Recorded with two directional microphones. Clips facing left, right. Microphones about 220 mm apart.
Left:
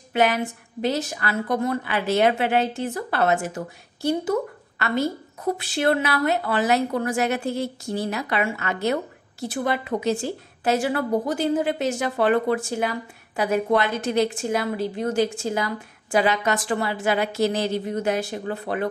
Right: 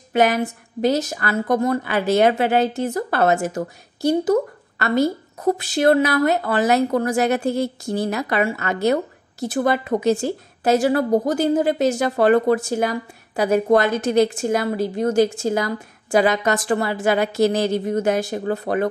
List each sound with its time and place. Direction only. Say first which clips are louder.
0.1 s a woman's voice: right 3 dB; 40° right (ahead or behind)